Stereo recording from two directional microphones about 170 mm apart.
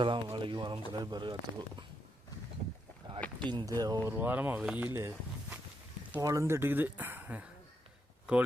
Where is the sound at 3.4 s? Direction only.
25° right (ahead or behind); by 4.8 s 5° right (ahead or behind).